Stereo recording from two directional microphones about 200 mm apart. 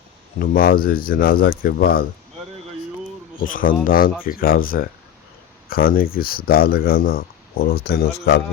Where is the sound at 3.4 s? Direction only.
45° left (ahead or behind).